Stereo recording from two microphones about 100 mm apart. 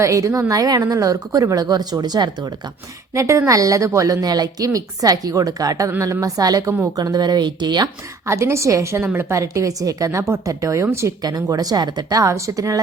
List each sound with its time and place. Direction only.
0.0 s a woman's voice: 30° right (ahead or behind)
3.2 s a woman's voice: 30° right (ahead or behind); by 7.9 s 45° right (ahead or behind)
8.3 s a woman's voice: 30° right (ahead or behind)